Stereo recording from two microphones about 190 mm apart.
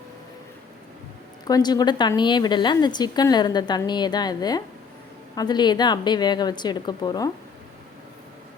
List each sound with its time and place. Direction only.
1.5 s a woman's voice: 20° left (ahead or behind)